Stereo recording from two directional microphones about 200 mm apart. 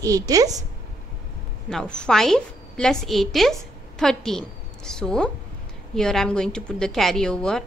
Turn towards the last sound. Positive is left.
turn(degrees=5)  # may be behind; listen again after turning